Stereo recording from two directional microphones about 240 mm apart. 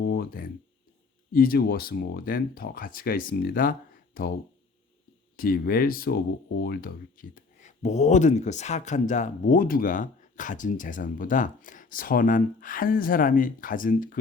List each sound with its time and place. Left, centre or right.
0.0 s a sound: left
1.3 s speech: left
5.4 s speech: left